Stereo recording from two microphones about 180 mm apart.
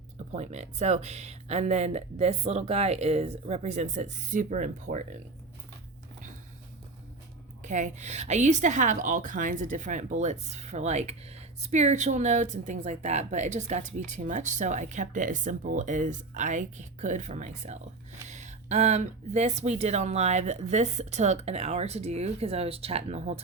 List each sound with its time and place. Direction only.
0.3 s a woman's voice: 40° right (ahead or behind)
7.6 s a woman's voice: 45° right (ahead or behind)